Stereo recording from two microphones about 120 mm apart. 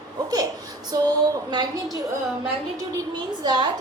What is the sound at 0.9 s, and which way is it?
Speech, 30° right (ahead or behind).